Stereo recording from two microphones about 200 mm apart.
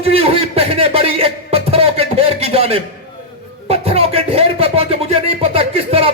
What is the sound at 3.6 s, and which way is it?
Music, 30° right (ahead or behind).